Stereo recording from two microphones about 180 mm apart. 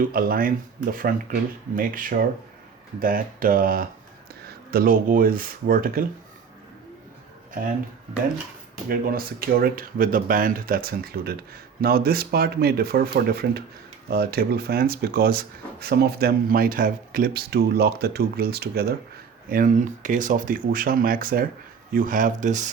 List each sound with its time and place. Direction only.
0.0 s speech: 55° right (ahead or behind)
8.9 s speech: 55° right (ahead or behind)